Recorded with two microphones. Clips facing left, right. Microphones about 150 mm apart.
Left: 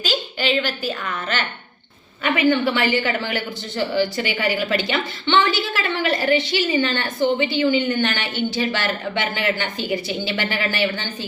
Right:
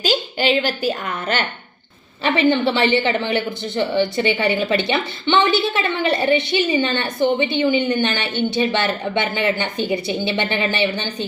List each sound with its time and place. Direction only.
0.0 s a woman's voice: 40° right (ahead or behind)
2.2 s a woman's voice: 30° right (ahead or behind)